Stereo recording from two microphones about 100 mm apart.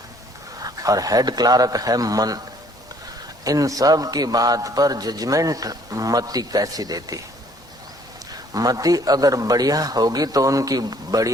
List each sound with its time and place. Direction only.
0.6 s a man's voice: 35° right (ahead or behind)
3.4 s a man's voice: 35° right (ahead or behind)
8.3 s a man's voice: 35° right (ahead or behind)